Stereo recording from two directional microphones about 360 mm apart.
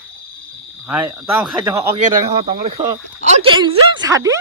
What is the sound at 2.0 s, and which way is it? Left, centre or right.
Speech, centre.